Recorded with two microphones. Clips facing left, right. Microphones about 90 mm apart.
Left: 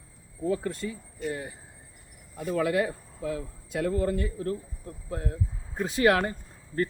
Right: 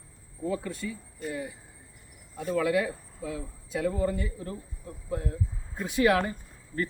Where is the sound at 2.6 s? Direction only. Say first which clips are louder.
Even; 55° left (ahead or behind).